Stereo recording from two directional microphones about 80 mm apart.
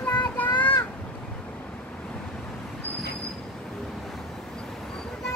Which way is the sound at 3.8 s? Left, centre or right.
Centre.